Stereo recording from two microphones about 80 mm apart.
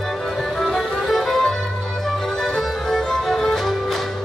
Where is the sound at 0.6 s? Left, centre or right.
Centre.